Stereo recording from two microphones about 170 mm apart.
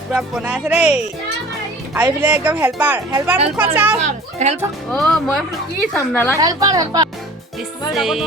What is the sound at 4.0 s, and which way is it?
Speech, 40° right (ahead or behind).